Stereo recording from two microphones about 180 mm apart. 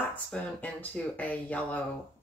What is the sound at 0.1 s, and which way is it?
Speech, 10° left (ahead or behind).